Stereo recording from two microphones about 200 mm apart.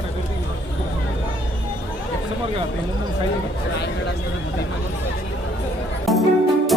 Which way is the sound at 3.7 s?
60° left (ahead or behind).